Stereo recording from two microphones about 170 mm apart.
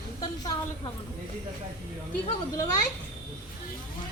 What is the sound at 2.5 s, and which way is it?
Speech, 20° left (ahead or behind).